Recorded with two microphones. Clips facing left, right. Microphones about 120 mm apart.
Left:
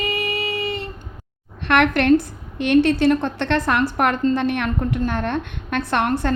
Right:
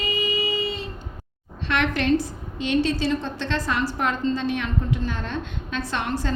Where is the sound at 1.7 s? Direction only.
60° left (ahead or behind).